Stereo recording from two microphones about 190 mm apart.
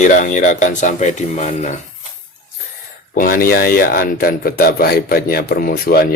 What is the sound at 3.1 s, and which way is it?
Speech, 50° left (ahead or behind).